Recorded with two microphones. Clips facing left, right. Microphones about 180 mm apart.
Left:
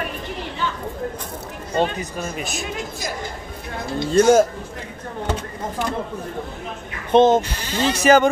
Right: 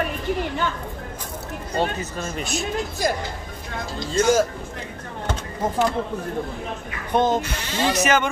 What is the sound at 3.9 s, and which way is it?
Speech, 60° left (ahead or behind).